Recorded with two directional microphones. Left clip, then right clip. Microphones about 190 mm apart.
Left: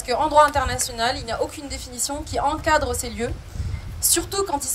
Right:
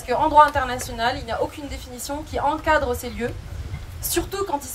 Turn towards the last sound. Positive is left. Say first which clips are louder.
# left 1 dB
turn(degrees=40)  # may be behind; listen again after turning